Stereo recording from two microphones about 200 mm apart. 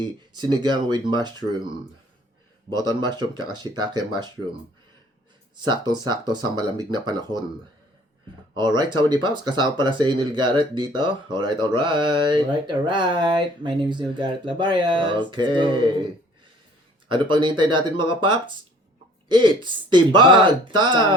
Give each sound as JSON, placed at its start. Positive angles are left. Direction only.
{"t": 0.0, "sound": "speech", "side_deg": -20}
{"t": 2.8, "sound": "speech", "side_deg": -20}
{"t": 5.6, "sound": "speech", "side_deg": -20}
{"t": 8.5, "sound": "speech", "side_deg": -20}
{"t": 17.1, "sound": "speech", "side_deg": -25}